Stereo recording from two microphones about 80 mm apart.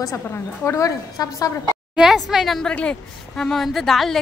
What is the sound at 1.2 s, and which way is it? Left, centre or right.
Speech, left.